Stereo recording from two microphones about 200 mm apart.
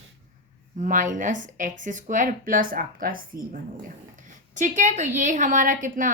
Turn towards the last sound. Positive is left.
turn(degrees=-40)  # may be behind; listen again after turning